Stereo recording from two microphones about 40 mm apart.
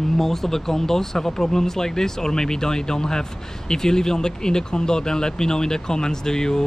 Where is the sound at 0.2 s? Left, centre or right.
Centre.